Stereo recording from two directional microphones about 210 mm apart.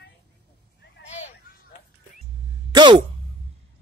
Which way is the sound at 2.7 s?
20° right (ahead or behind).